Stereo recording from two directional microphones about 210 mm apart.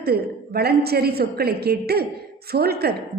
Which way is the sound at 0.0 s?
50° right (ahead or behind).